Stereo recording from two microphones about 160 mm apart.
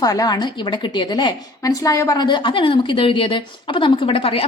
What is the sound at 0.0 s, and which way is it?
A woman's voice, 25° left (ahead or behind).